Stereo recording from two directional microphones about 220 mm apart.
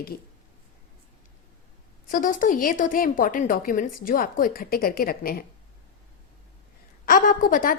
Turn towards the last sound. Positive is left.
turn(degrees=40)  # may be behind; listen again after turning